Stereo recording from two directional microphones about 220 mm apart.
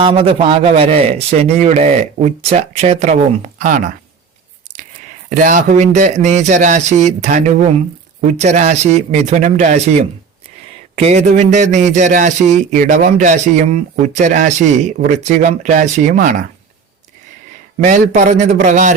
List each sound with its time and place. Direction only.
0.0 s a man's voice: 25° right (ahead or behind)
5.3 s speech: 35° right (ahead or behind)
17.8 s speech: 30° right (ahead or behind)